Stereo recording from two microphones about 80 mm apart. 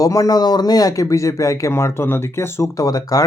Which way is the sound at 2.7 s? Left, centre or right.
Left.